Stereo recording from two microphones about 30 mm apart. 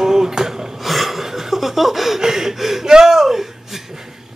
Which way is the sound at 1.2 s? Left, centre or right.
Centre.